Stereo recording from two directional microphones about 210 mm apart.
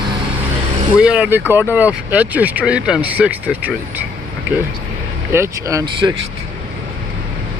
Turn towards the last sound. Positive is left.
turn(degrees=-20)  # may be behind; listen again after turning